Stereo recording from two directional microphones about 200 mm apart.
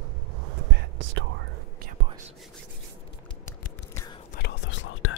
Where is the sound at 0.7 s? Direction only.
65° right (ahead or behind).